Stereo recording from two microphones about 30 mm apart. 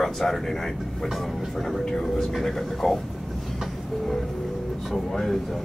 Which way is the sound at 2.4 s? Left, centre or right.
Centre.